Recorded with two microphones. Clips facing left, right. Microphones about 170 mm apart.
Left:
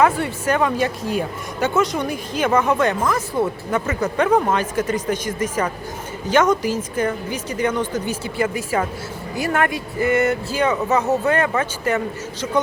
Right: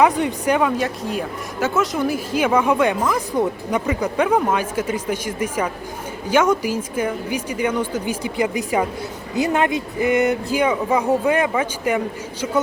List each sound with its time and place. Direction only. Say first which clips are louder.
0.0 s speech: right 1 dB; 15° right (ahead or behind)
0.8 s speech: left 2 dB; centre (ahead or behind)